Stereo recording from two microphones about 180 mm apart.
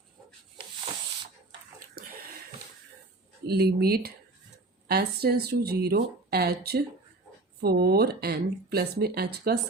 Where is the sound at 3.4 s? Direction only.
60° right (ahead or behind).